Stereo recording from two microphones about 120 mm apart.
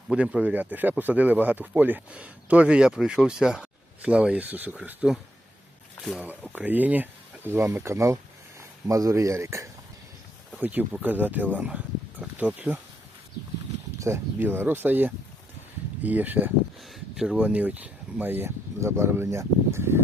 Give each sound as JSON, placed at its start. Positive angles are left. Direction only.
{"t": 0.1, "sound": "speech", "side_deg": -10}
{"t": 6.0, "sound": "speech", "side_deg": 0}
{"t": 6.2, "sound": "speech", "side_deg": -10}
{"t": 10.6, "sound": "speech", "side_deg": -15}
{"t": 14.0, "sound": "speech", "side_deg": -20}
{"t": 16.9, "sound": "speech", "side_deg": -5}